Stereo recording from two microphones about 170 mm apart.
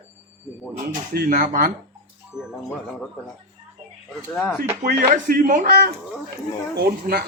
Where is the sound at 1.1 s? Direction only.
60° right (ahead or behind).